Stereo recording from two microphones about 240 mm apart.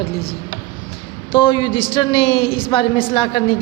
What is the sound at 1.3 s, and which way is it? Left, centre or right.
A woman's voice, centre.